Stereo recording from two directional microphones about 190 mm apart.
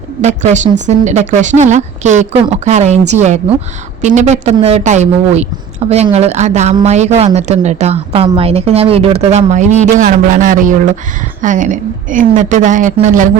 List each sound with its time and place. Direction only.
0.2 s a woman's voice: 40° right (ahead or behind)